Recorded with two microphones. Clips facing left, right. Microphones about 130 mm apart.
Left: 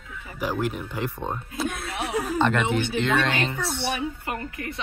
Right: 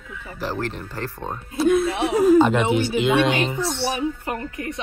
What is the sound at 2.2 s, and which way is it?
Speech, centre (ahead or behind).